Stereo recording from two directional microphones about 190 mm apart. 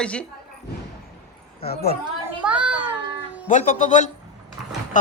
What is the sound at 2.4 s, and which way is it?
Child singing, 5° right (ahead or behind).